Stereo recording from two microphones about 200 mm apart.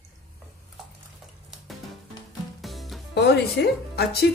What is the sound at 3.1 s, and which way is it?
Speech, 55° left (ahead or behind).